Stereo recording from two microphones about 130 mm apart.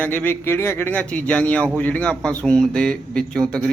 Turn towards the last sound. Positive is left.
turn(degrees=5)  # may be behind; listen again after turning